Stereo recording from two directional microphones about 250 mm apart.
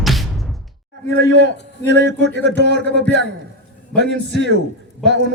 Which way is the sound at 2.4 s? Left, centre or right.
Right.